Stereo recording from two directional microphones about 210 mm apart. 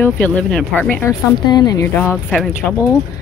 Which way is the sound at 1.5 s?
20° left (ahead or behind).